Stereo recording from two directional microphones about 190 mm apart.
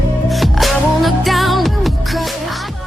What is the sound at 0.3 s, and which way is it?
Music, centre (ahead or behind).